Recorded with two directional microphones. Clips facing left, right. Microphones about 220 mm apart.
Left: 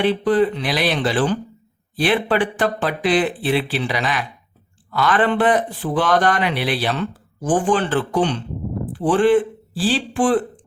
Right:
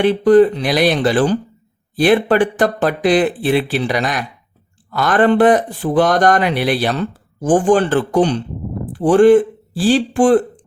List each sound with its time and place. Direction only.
0.0 s speech: 45° right (ahead or behind)